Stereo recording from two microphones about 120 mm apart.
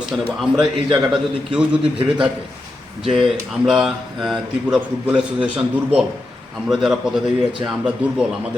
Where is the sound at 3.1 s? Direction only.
Centre (ahead or behind).